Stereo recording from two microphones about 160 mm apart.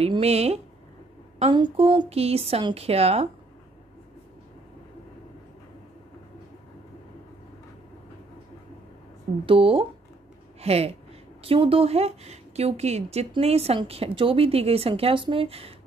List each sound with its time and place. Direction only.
0.0 s a woman's voice: 40° right (ahead or behind)
9.5 s a woman's voice: 35° right (ahead or behind)